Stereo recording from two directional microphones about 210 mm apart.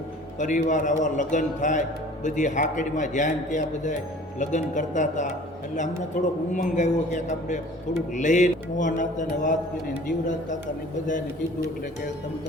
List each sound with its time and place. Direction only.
0.3 s speech: 35° left (ahead or behind)